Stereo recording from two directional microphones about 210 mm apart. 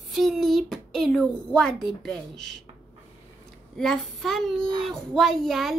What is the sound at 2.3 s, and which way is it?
Speech, 55° right (ahead or behind).